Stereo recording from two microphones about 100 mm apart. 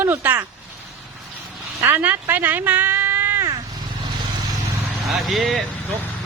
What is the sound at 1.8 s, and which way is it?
Speech, 20° right (ahead or behind).